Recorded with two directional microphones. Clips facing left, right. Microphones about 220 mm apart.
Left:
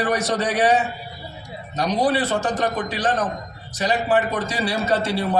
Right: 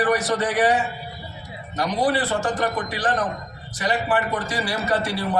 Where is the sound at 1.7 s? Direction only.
20° left (ahead or behind).